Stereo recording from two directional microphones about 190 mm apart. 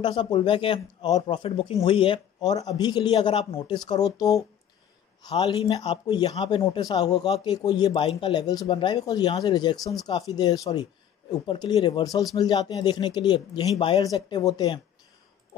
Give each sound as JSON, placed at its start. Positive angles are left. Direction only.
{"t": 0.0, "sound": "speech", "side_deg": 25}
{"t": 5.3, "sound": "speech", "side_deg": 30}